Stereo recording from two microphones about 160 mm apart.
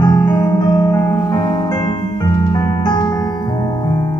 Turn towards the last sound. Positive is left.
turn(degrees=25)  # may be behind; listen again after turning